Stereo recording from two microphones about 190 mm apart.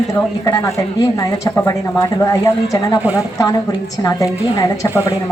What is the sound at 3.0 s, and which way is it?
Speech, 10° right (ahead or behind).